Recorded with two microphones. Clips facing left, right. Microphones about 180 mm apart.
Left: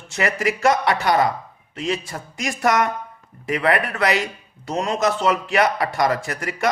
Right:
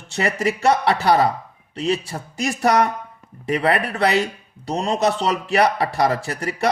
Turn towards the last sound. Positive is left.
turn(degrees=-30)  # may be behind; listen again after turning